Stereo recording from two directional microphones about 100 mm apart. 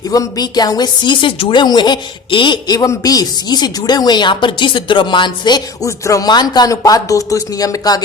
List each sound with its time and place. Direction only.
0.1 s a woman's voice: 40° left (ahead or behind)